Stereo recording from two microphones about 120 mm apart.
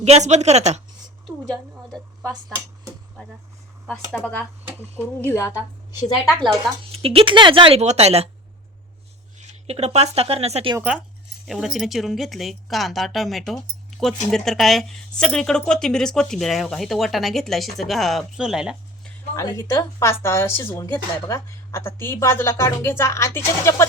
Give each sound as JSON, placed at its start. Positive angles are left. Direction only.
{"t": 0.0, "sound": "speech", "side_deg": -70}
{"t": 1.5, "sound": "speech", "side_deg": 5}
{"t": 3.8, "sound": "speech", "side_deg": 5}
{"t": 6.0, "sound": "a woman's voice", "side_deg": 35}
{"t": 6.9, "sound": "speech", "side_deg": -50}
{"t": 7.8, "sound": "a woman's voice", "side_deg": -65}
{"t": 9.4, "sound": "speech", "side_deg": -65}
{"t": 11.4, "sound": "speech", "side_deg": 0}
{"t": 19.4, "sound": "a woman's voice", "side_deg": 30}